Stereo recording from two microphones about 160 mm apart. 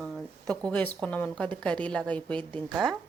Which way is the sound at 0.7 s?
10° left (ahead or behind).